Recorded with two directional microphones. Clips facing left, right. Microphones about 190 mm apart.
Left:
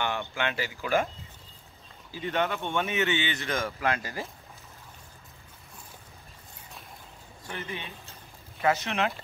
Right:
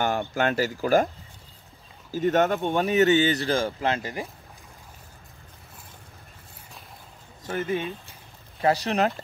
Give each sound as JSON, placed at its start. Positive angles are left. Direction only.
{"t": 0.0, "sound": "speech", "side_deg": -40}
{"t": 2.0, "sound": "speech", "side_deg": -45}
{"t": 7.4, "sound": "speech", "side_deg": -45}
{"t": 8.5, "sound": "speech", "side_deg": -35}